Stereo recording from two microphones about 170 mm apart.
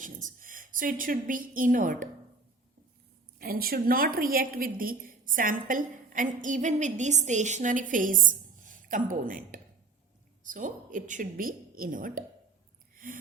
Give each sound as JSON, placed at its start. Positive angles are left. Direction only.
{"t": 0.0, "sound": "a woman's voice", "side_deg": -50}
{"t": 3.3, "sound": "a woman's voice", "side_deg": -60}